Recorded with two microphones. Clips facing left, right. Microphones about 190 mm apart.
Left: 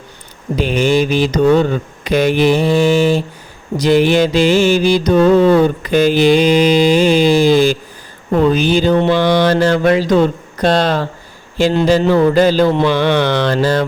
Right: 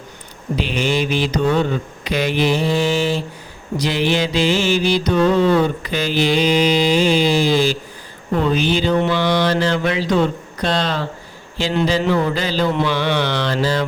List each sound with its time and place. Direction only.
0.5 s mantra: 45° left (ahead or behind)